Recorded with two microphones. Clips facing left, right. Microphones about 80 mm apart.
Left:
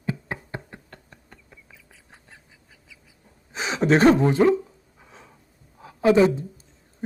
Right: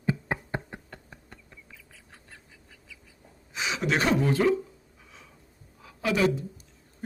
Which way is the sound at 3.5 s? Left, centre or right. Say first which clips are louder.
Left 7 dB; left.